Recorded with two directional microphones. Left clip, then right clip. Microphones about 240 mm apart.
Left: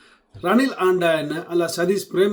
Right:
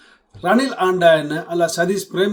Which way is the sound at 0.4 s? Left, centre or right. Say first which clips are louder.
Right 2 dB; centre.